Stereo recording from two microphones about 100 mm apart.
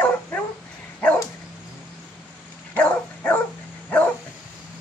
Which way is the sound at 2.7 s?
15° left (ahead or behind).